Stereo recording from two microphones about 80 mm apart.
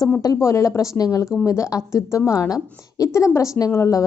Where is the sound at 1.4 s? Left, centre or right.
Left.